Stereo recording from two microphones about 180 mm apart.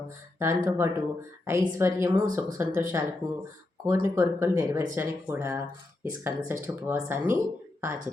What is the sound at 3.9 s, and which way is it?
Speech, 15° right (ahead or behind).